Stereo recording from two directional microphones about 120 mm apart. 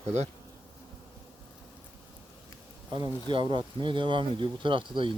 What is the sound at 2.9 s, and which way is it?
Speech, 35° right (ahead or behind).